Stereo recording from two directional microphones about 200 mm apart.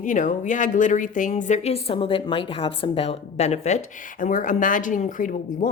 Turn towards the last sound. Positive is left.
turn(degrees=40)  # may be behind; listen again after turning